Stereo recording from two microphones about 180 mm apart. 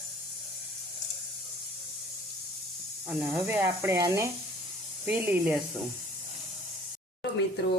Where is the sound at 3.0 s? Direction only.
10° right (ahead or behind).